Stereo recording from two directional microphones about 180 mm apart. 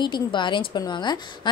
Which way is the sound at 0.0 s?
25° left (ahead or behind).